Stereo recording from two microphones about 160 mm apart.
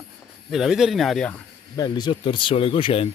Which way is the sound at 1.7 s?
25° left (ahead or behind).